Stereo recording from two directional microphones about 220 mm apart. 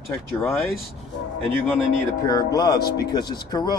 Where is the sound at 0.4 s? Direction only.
Centre (ahead or behind).